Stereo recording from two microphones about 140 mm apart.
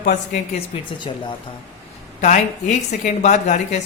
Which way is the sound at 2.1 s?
55° left (ahead or behind).